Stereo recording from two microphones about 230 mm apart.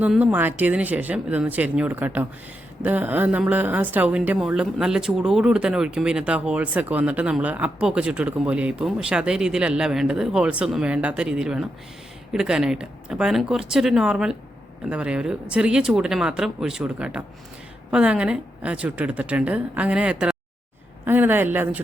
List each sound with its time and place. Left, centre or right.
0.0 s a woman's voice: centre